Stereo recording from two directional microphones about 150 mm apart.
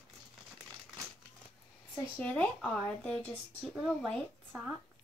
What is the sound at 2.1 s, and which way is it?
Speech, 10° left (ahead or behind).